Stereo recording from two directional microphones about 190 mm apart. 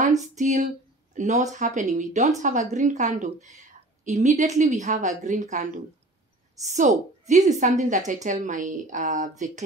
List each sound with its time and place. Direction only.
0.2 s a woman's voice: 40° right (ahead or behind)